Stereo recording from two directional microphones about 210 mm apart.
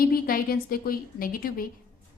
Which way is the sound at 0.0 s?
45° left (ahead or behind).